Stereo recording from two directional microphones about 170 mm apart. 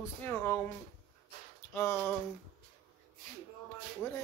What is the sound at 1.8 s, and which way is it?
Speech, 15° left (ahead or behind).